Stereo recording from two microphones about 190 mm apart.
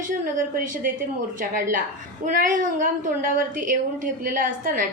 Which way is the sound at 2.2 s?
45° right (ahead or behind).